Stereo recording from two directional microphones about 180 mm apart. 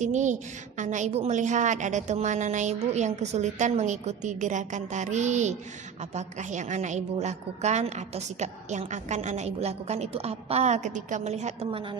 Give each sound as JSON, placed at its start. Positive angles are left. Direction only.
{"t": 0.0, "sound": "a woman's voice", "side_deg": -40}